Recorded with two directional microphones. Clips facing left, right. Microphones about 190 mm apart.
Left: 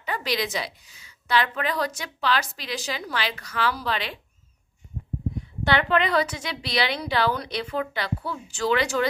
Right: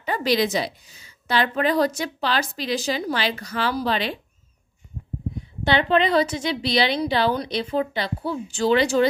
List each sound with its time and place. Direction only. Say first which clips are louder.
0.0 s a woman's voice: right 6 dB; 30° right (ahead or behind)
5.6 s a woman's voice: right 3 dB; 25° right (ahead or behind)